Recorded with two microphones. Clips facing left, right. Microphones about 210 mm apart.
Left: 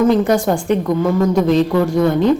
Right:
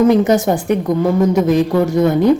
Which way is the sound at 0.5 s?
20° right (ahead or behind).